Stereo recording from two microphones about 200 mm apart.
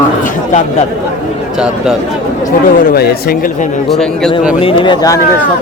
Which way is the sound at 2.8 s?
50° left (ahead or behind).